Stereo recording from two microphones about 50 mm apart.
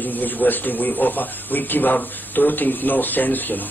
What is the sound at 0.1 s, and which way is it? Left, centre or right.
Speech, left.